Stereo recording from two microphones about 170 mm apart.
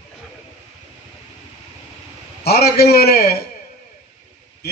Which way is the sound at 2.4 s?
65° left (ahead or behind).